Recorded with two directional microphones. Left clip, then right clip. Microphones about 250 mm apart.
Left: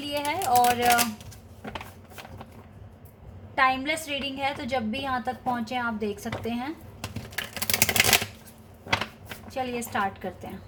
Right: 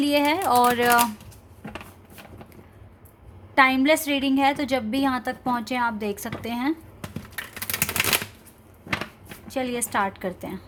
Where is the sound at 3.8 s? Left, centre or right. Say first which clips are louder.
Right 8 dB; right.